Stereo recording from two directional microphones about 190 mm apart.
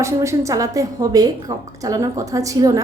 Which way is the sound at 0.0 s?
15° right (ahead or behind).